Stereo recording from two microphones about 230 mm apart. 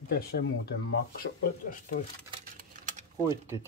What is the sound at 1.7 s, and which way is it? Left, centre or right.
Speech, left.